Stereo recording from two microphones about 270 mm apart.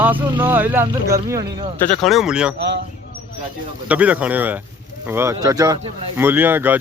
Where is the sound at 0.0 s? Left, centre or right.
Centre.